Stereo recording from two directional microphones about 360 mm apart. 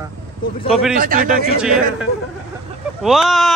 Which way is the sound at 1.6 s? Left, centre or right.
Centre.